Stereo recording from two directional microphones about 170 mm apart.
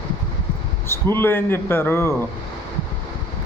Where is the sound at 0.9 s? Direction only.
15° left (ahead or behind).